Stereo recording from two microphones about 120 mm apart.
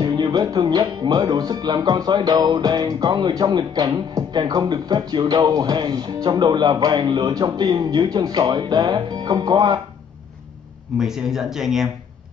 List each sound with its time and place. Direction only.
0.0 s speech: 35° right (ahead or behind)
11.0 s speech: 5° right (ahead or behind)